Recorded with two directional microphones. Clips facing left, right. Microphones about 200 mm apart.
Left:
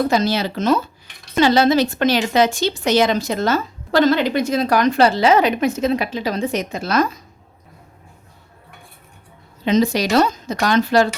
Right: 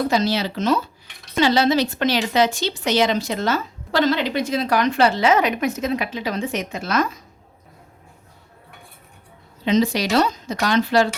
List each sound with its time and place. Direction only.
0.1 s speech: 50° left (ahead or behind)
9.6 s speech: 45° left (ahead or behind)